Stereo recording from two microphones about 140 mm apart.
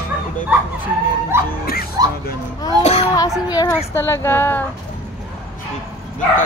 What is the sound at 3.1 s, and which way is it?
Speech, 25° left (ahead or behind).